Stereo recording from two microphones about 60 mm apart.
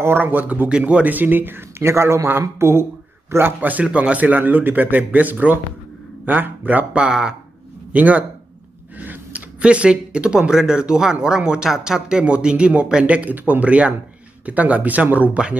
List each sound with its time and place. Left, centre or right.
0.0 s speech: right
0.7 s speech: centre
7.9 s speech: right